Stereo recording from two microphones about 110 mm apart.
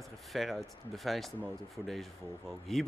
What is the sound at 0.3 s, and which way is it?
A man's voice, centre (ahead or behind).